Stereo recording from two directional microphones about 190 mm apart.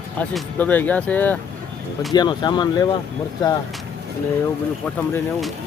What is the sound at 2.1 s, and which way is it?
Speech, 20° left (ahead or behind).